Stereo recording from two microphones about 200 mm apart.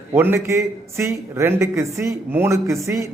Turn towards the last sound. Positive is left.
turn(degrees=-15)  # may be behind; listen again after turning